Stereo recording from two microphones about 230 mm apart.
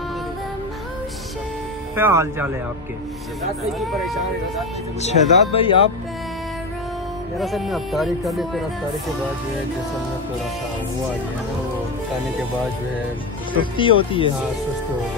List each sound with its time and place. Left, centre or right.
2.0 s speech: centre
3.8 s speech: centre
5.0 s speech: left
7.3 s speech: centre
13.7 s speech: left